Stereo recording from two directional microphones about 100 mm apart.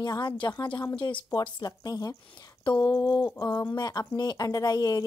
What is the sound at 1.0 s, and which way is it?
Speech, 55° left (ahead or behind).